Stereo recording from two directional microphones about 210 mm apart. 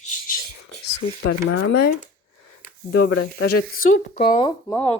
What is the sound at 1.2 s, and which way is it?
Speech, 90° left.